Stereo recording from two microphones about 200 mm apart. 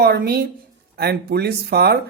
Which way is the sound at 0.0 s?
55° right (ahead or behind).